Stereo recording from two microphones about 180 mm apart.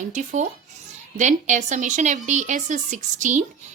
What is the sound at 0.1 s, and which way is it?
A woman's voice, 45° right (ahead or behind).